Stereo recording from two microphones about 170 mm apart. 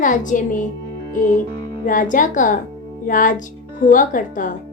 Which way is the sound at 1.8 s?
50° left (ahead or behind).